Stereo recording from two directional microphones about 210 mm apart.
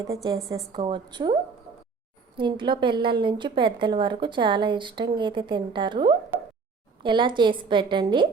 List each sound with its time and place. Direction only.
0.1 s a woman's voice: 15° right (ahead or behind)
2.4 s a woman's voice: 20° right (ahead or behind)